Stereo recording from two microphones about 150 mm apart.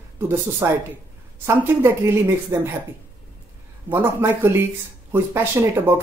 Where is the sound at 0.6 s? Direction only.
20° right (ahead or behind).